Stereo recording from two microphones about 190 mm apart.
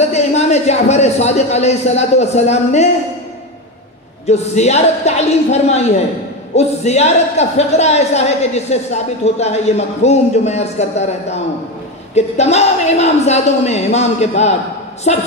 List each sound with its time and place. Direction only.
0.0 s speech: 35° left (ahead or behind)
4.3 s speech: 35° left (ahead or behind)